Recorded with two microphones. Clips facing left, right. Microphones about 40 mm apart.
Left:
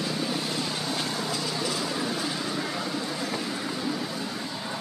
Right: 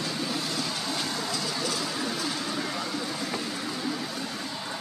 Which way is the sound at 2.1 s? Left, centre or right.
Centre.